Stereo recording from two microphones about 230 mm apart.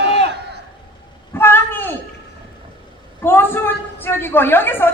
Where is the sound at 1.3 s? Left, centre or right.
Centre.